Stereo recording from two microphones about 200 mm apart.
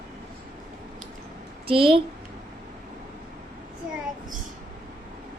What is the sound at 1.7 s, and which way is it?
Speech, 25° right (ahead or behind).